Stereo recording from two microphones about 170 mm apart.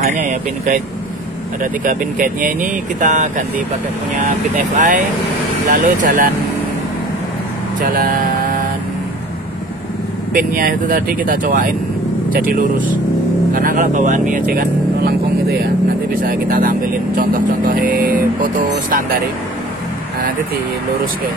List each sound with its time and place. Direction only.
0.0 s speech: 50° right (ahead or behind)
4.7 s speech: 50° right (ahead or behind)
7.8 s speech: 55° right (ahead or behind)
10.3 s speech: 55° right (ahead or behind)
16.2 s speech: 55° right (ahead or behind)
17.9 s music: 55° right (ahead or behind)